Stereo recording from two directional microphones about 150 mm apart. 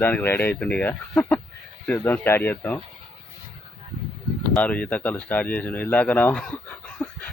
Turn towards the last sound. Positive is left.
turn(degrees=10)  # may be behind; listen again after turning